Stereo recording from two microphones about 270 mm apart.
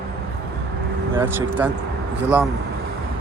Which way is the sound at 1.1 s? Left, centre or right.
Centre.